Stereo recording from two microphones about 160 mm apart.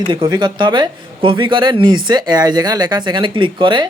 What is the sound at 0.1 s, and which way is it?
A man's voice, 30° right (ahead or behind).